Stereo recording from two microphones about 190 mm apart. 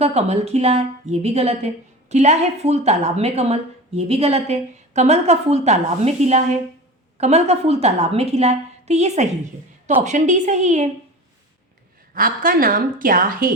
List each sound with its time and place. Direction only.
0.0 s a woman's voice: 35° right (ahead or behind)
12.1 s a woman's voice: 50° right (ahead or behind)